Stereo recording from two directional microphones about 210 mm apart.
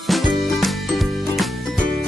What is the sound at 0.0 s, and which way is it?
Music, centre (ahead or behind).